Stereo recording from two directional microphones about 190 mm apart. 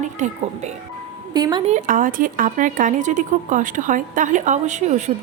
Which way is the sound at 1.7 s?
45° right (ahead or behind).